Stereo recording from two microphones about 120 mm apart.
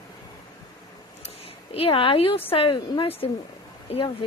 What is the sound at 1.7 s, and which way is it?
A woman's voice, 50° left (ahead or behind).